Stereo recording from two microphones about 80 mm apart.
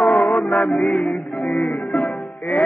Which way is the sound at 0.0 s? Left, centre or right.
Centre.